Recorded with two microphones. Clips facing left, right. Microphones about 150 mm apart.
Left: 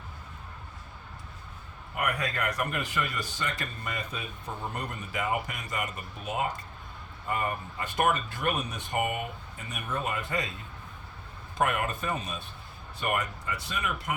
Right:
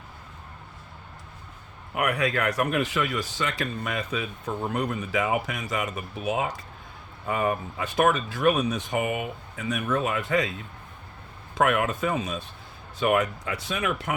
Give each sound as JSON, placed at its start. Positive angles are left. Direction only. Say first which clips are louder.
{"t": 2.0, "sound": "speech", "louder": "right 6 dB", "side_deg": -80}
{"t": 11.5, "sound": "speech", "louder": "right 5 dB", "side_deg": -90}
{"t": 13.0, "sound": "speech", "louder": "right 8 dB", "side_deg": -80}